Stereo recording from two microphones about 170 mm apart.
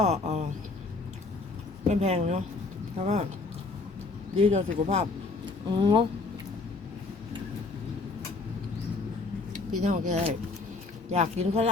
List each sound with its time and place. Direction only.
0.0 s a sound: 40° right (ahead or behind)
1.9 s speech: 40° right (ahead or behind)
4.4 s speech: 35° right (ahead or behind)
9.5 s speech: 45° right (ahead or behind)